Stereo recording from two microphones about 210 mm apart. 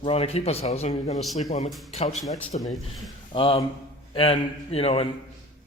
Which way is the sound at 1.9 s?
30° left (ahead or behind).